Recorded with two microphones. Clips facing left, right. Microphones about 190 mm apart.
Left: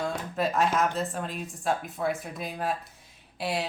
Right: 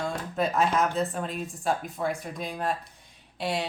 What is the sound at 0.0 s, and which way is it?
Speech, centre (ahead or behind).